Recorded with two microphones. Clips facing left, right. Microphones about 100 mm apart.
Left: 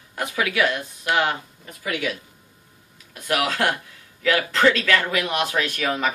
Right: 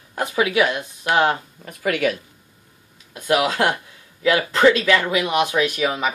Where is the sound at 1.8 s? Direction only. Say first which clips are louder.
Right 6 dB; 55° right (ahead or behind).